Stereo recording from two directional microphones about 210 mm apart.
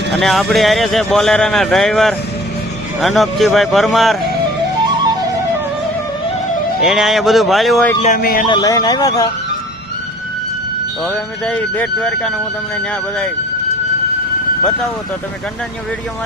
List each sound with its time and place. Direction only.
0.1 s speech: centre (ahead or behind)
6.8 s speech: centre (ahead or behind)
8.1 s speech: 45° left (ahead or behind)
8.4 s speech: 20° left (ahead or behind)
11.0 s speech: 5° left (ahead or behind)